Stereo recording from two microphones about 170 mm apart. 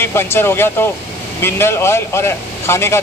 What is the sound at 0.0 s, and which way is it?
Speech, 15° left (ahead or behind).